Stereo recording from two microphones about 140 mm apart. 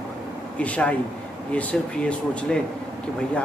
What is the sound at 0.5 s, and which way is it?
A man's voice, 10° left (ahead or behind).